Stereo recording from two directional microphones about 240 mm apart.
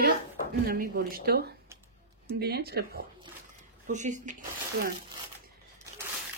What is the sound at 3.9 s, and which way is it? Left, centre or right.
Speech, right.